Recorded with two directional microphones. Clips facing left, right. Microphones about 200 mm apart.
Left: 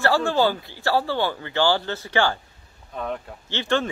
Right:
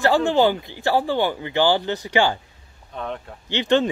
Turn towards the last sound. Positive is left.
turn(degrees=-20)  # may be behind; listen again after turning